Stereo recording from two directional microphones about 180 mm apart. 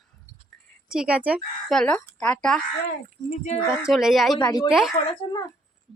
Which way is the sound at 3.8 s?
Centre (ahead or behind).